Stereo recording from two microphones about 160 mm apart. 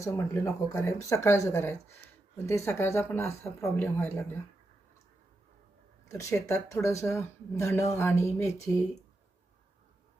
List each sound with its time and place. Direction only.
0.0 s speech: 20° left (ahead or behind)
6.1 s speech: 20° left (ahead or behind)